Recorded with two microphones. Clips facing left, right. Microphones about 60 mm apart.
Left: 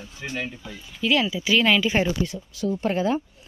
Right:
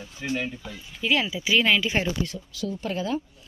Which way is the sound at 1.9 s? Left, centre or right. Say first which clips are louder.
Left 3 dB; centre.